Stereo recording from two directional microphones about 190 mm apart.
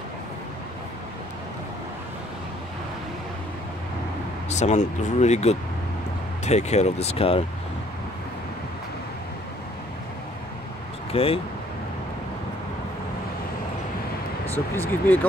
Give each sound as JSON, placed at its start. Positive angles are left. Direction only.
{"t": 4.5, "sound": "speech", "side_deg": 35}
{"t": 11.1, "sound": "speech", "side_deg": 30}
{"t": 14.5, "sound": "speech", "side_deg": 10}